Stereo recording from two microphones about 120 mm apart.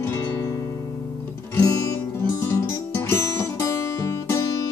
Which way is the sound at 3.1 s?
20° left (ahead or behind).